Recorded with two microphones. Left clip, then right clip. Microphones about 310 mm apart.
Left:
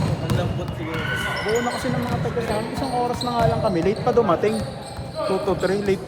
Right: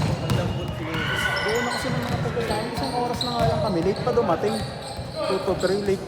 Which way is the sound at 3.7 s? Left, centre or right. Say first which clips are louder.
Left 3 dB; left.